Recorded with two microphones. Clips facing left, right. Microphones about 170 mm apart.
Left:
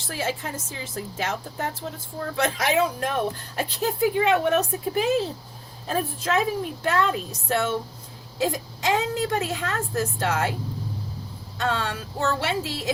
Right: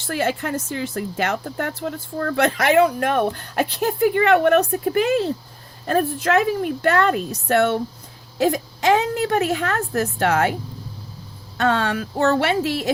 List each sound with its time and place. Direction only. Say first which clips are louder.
0.1 s speech: right 7 dB; 65° right (ahead or behind)
11.5 s speech: right 7 dB; 65° right (ahead or behind)